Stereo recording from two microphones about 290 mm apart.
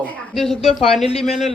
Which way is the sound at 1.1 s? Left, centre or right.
Centre.